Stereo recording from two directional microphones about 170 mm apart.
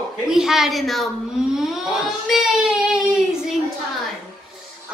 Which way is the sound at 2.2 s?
Centre (ahead or behind).